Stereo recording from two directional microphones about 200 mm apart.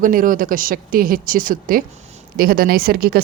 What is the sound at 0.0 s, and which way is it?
Speech, 45° right (ahead or behind).